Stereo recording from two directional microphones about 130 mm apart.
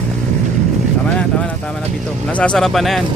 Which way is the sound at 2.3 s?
10° left (ahead or behind).